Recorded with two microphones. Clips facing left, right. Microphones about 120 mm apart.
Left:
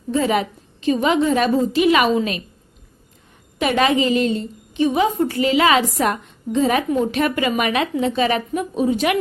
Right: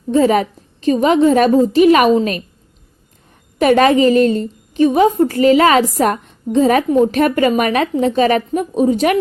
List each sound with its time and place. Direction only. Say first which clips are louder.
0.1 s a woman's voice: right 6 dB; 40° right (ahead or behind)
3.6 s a woman's voice: right 7 dB; 45° right (ahead or behind)